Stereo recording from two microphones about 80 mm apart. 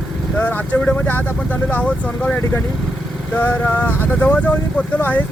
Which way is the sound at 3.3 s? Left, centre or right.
Left.